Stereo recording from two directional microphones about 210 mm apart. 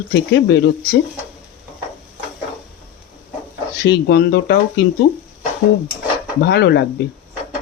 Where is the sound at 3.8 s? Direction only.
50° left (ahead or behind).